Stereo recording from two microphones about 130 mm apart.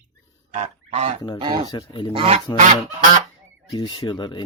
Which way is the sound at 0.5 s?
70° right (ahead or behind).